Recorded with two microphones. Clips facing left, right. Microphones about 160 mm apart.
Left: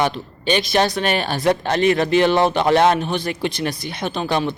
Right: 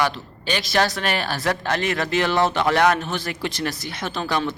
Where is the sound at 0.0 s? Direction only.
20° left (ahead or behind).